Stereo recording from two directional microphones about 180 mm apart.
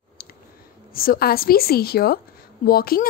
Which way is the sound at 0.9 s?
55° left (ahead or behind).